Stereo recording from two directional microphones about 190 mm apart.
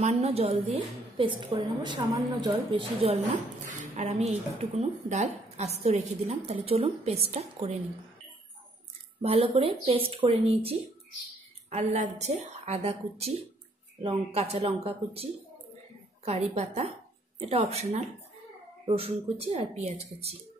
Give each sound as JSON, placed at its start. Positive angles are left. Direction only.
{"t": 0.0, "sound": "a woman's voice", "side_deg": -35}
{"t": 9.2, "sound": "a woman's voice", "side_deg": -30}
{"t": 16.3, "sound": "a woman's voice", "side_deg": -35}